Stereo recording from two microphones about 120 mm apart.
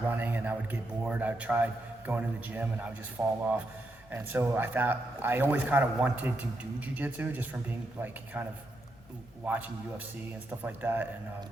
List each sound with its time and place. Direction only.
0.1 s a man's voice: 15° right (ahead or behind)